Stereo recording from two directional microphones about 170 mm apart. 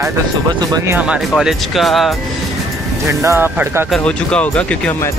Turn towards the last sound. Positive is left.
turn(degrees=5)  # may be behind; listen again after turning